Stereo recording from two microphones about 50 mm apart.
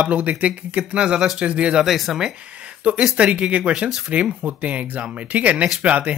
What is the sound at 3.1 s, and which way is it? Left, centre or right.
Speech, right.